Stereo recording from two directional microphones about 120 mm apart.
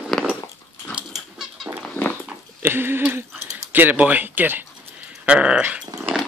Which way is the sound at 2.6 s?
20° right (ahead or behind).